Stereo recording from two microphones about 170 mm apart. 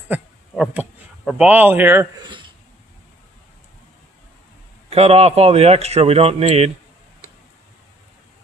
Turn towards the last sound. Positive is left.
turn(degrees=-40)  # may be behind; listen again after turning